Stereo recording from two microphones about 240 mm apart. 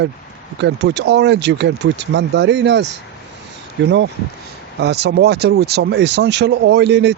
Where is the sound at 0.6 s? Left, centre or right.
Right.